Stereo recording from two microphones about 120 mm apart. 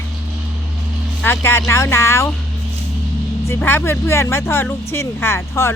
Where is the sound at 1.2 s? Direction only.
20° left (ahead or behind).